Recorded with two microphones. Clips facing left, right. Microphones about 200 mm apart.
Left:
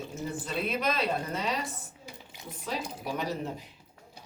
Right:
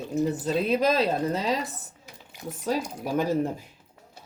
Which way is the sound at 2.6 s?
45° right (ahead or behind).